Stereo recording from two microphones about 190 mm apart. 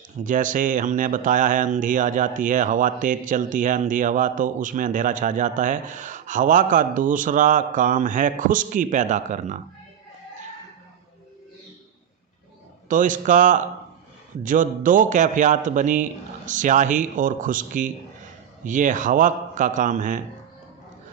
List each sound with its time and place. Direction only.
0.2 s speech: 45° right (ahead or behind)
12.9 s a man's voice: 45° right (ahead or behind)